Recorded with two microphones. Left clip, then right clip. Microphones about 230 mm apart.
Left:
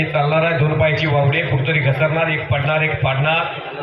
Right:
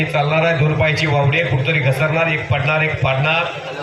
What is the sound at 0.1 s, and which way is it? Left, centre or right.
A man's voice, right.